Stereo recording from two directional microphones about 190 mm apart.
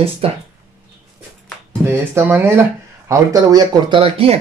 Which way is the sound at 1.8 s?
10° right (ahead or behind).